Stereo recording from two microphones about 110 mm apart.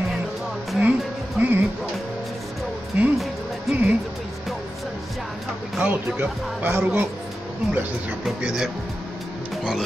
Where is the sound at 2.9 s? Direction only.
10° right (ahead or behind).